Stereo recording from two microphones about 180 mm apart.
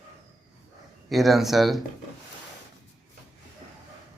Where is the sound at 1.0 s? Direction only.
Centre (ahead or behind).